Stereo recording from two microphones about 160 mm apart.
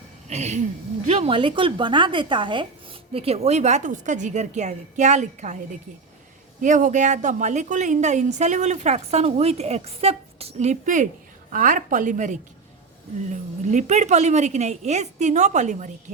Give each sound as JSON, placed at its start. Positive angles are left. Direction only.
{"t": 0.3, "sound": "a woman's voice", "side_deg": -45}
{"t": 6.6, "sound": "a woman's voice", "side_deg": -50}